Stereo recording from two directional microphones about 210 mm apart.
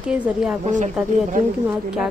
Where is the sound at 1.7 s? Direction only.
5° right (ahead or behind).